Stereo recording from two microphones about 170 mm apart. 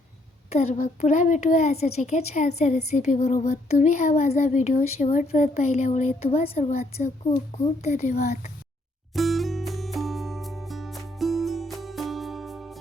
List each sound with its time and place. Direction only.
0.5 s a woman's voice: 45° left (ahead or behind)
9.1 s music: centre (ahead or behind)